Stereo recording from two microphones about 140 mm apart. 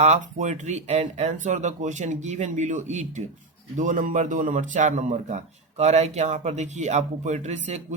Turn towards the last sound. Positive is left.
turn(degrees=-55)  # may be behind; listen again after turning